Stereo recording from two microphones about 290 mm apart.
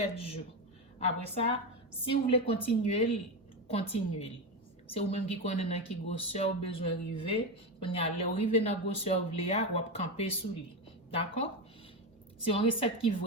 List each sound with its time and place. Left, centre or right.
0.0 s speech: left